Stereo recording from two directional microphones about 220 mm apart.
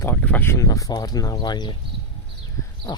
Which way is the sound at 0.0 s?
10° left (ahead or behind).